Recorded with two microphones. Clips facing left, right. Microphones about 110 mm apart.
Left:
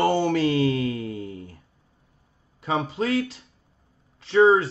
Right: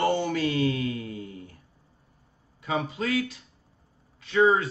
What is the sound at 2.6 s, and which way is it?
Speech, 30° left (ahead or behind).